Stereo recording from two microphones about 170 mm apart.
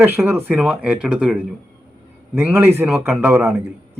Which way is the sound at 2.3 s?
10° right (ahead or behind).